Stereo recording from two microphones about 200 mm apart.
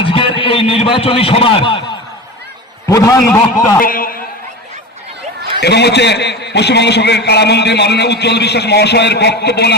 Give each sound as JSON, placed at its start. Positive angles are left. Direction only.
{"t": 0.0, "sound": "a man's voice", "side_deg": 25}
{"t": 3.8, "sound": "a man's voice", "side_deg": 45}
{"t": 5.5, "sound": "a man's voice", "side_deg": 55}